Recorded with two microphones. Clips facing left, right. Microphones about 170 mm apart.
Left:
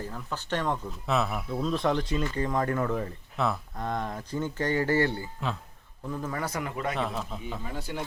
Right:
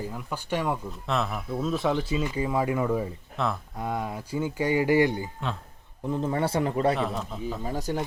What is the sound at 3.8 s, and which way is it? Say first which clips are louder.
A man's voice: right 1 dB; 10° right (ahead or behind).